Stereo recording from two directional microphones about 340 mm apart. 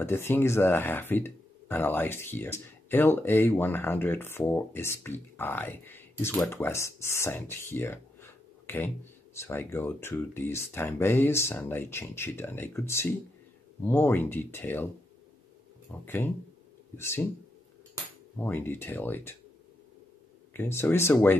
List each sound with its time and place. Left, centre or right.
0.0 s speech: centre
15.9 s speech: centre
18.4 s speech: centre
20.5 s speech: centre